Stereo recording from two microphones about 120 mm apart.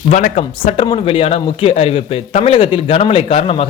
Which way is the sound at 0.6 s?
45° left (ahead or behind).